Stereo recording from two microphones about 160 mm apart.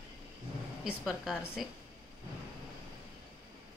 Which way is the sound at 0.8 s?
5° right (ahead or behind).